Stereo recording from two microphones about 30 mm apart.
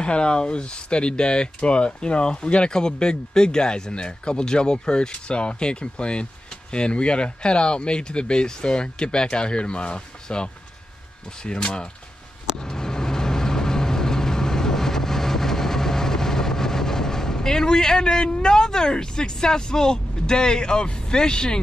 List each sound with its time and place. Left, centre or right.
0.0 s speech: left
12.6 s vehicle: left
18.0 s speech: left